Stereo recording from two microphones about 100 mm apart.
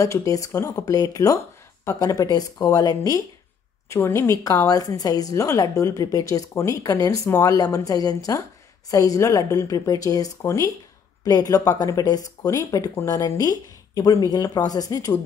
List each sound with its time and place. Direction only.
0.0 s speech: 35° left (ahead or behind)
3.9 s speech: 30° left (ahead or behind)